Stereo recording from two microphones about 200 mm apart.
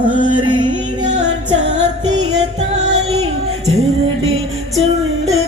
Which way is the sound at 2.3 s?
35° right (ahead or behind).